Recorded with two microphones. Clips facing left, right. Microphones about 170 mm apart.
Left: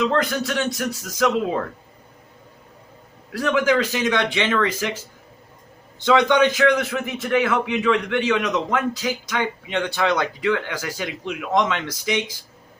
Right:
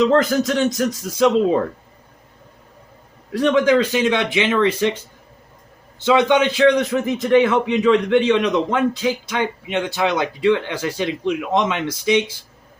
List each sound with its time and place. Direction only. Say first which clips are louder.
0.0 s a man's voice: right 6 dB; 45° right (ahead or behind)
3.4 s speech: right 4 dB; 30° right (ahead or behind)
4.8 s a man's voice: right 7 dB; 30° right (ahead or behind)
6.1 s a man's voice: right 1 dB; 20° right (ahead or behind)
6.6 s a man's voice: right 4 dB; 35° right (ahead or behind)